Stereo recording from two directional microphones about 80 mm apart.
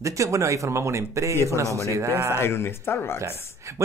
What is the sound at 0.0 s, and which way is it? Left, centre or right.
Speech, right.